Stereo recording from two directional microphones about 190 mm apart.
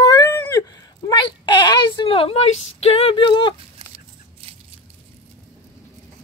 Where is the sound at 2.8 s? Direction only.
30° left (ahead or behind).